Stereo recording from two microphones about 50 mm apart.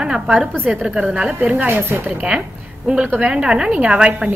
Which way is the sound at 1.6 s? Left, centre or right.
Right.